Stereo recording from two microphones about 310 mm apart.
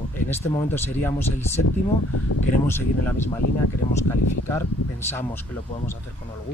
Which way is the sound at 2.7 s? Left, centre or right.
Centre.